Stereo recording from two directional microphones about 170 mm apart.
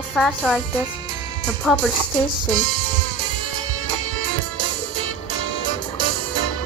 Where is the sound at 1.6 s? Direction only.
5° left (ahead or behind).